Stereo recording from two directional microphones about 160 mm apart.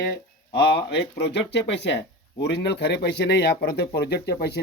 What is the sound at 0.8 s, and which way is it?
Speech, 90° left.